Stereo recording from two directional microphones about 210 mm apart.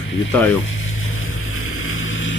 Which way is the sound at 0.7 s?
65° left (ahead or behind).